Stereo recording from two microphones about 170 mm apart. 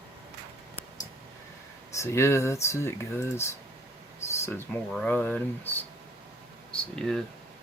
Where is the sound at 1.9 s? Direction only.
15° left (ahead or behind).